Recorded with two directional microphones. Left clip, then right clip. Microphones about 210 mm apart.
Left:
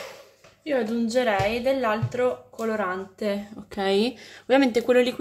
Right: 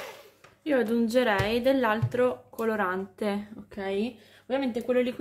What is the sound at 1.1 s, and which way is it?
A woman's voice, 35° right (ahead or behind).